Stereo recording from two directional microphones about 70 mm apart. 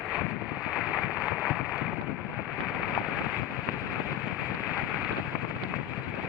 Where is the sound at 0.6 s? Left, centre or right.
Centre.